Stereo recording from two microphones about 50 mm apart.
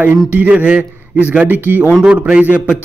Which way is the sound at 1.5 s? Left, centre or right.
Right.